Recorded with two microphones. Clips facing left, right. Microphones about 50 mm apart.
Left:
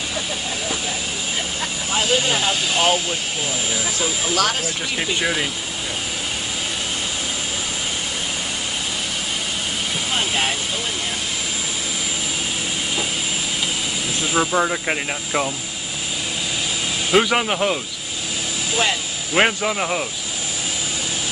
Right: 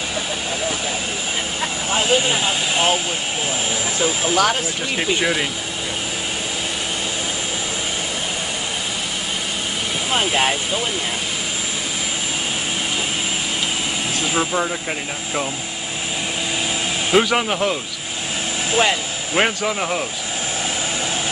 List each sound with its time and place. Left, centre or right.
1.9 s vehicle: right
2.1 s speech: centre
4.4 s speech: centre
10.1 s speech: centre
14.3 s speech: centre
14.6 s speech: centre
17.1 s speech: centre
19.3 s speech: centre